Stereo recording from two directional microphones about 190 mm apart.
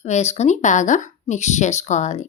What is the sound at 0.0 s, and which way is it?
Speech, 35° left (ahead or behind).